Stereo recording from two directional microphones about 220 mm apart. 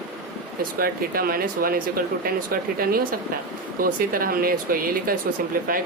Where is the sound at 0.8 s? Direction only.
40° right (ahead or behind).